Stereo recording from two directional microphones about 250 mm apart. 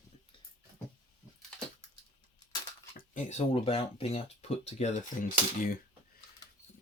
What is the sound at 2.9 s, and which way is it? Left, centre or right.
Speech, left.